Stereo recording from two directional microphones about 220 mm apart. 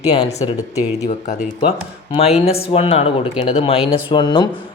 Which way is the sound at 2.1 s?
30° left (ahead or behind).